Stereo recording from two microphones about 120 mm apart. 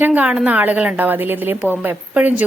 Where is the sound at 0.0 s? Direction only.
15° right (ahead or behind).